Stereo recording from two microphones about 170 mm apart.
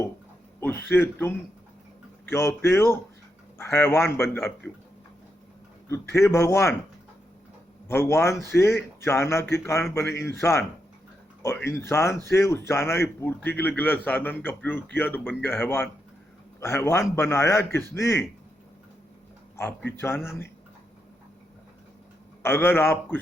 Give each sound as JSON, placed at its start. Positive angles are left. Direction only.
{"t": 0.6, "sound": "a man's voice", "side_deg": 10}
{"t": 5.9, "sound": "a man's voice", "side_deg": 15}
{"t": 7.9, "sound": "a man's voice", "side_deg": 15}
{"t": 19.5, "sound": "a man's voice", "side_deg": 10}
{"t": 22.4, "sound": "a man's voice", "side_deg": 15}